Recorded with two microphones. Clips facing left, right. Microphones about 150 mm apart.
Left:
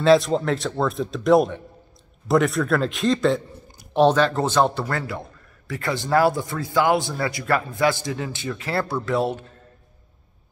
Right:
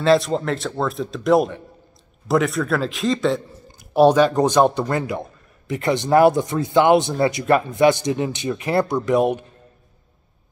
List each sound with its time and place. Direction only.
0.0 s speech: centre (ahead or behind)
3.9 s speech: 10° right (ahead or behind)